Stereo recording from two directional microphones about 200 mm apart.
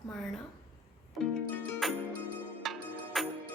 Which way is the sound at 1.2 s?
Centre (ahead or behind).